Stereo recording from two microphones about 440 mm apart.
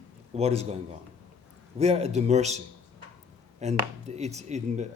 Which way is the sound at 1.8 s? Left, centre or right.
Centre.